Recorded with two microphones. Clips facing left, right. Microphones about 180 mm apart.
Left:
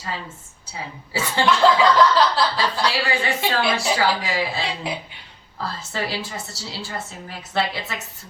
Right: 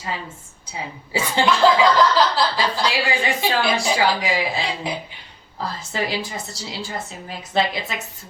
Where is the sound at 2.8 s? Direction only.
15° right (ahead or behind).